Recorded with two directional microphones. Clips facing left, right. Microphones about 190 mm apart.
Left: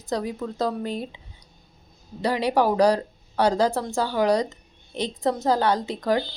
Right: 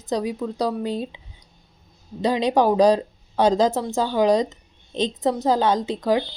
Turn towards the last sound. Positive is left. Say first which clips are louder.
# right 3 dB
turn(degrees=-15)  # may be behind; listen again after turning